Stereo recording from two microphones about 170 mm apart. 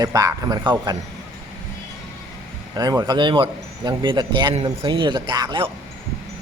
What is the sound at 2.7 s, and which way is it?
Speech, 20° right (ahead or behind).